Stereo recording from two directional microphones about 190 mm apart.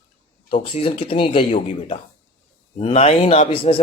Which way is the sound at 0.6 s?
30° left (ahead or behind).